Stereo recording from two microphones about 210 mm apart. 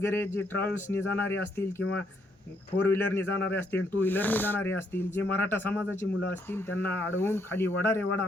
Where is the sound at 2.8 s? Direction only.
10° left (ahead or behind).